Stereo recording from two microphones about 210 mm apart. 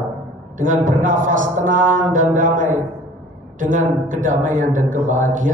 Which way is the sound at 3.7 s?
40° right (ahead or behind).